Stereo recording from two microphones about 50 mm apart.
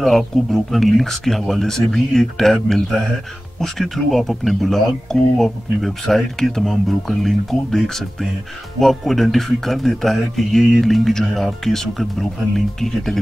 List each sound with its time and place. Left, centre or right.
0.0 s speech: centre